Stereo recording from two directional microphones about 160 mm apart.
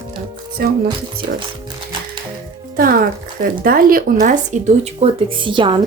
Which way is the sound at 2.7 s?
65° right (ahead or behind).